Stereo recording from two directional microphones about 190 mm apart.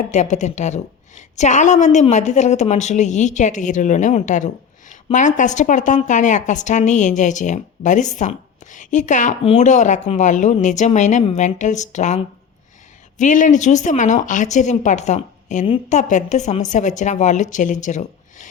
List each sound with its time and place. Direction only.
0.1 s speech: 40° left (ahead or behind)